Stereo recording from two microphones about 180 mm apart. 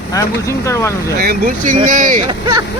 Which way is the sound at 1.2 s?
55° right (ahead or behind).